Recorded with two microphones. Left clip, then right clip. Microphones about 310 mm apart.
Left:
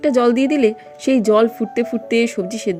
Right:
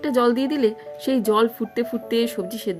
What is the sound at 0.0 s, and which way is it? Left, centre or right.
Speech, centre.